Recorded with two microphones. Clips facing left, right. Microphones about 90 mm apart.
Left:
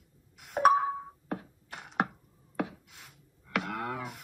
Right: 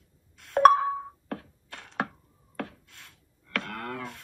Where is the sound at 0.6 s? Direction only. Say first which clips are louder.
Right 5 dB; 90° right.